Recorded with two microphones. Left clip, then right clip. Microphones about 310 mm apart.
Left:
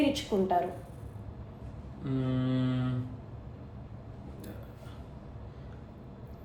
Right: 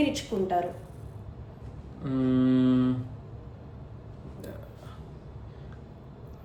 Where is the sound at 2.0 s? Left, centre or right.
Right.